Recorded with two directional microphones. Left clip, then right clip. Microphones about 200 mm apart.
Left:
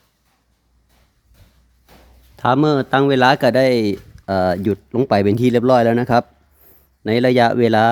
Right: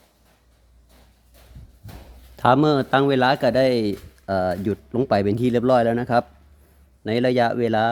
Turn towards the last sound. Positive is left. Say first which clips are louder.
# left 6 dB
turn(degrees=25)  # may be behind; listen again after turning